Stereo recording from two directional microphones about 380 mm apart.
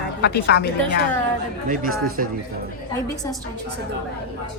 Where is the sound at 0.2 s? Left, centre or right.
Left.